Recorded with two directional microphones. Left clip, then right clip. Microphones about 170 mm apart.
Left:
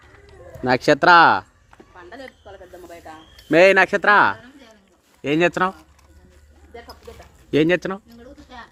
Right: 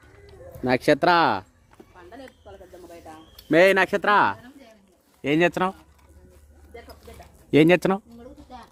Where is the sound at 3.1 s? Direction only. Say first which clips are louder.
Left 4 dB; 25° left (ahead or behind).